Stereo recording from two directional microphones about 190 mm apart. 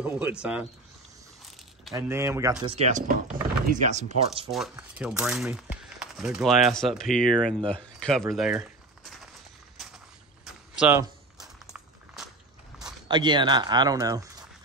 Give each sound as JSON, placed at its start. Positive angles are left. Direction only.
{"t": 0.0, "sound": "speech", "side_deg": -5}
{"t": 2.0, "sound": "speech", "side_deg": -15}
{"t": 2.6, "sound": "speech", "side_deg": -35}
{"t": 4.5, "sound": "speech", "side_deg": 0}
{"t": 9.8, "sound": "walk", "side_deg": 0}
{"t": 10.4, "sound": "a sound", "side_deg": -10}
{"t": 13.1, "sound": "speech", "side_deg": -25}